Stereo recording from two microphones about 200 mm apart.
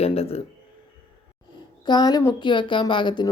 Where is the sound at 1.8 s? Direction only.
20° left (ahead or behind).